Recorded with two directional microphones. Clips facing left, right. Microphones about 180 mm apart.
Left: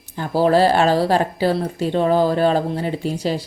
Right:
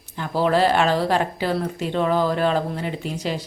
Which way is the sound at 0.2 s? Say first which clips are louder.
Left 4 dB; 35° left (ahead or behind).